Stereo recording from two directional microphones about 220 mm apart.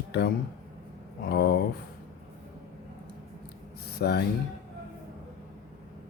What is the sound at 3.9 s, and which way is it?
Speech, 45° left (ahead or behind).